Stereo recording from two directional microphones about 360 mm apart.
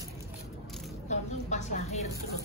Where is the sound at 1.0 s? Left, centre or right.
Centre.